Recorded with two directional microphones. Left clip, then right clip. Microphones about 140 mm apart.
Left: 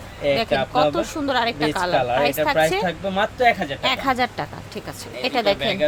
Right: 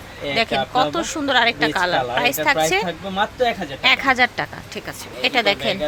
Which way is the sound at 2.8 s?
35° left (ahead or behind).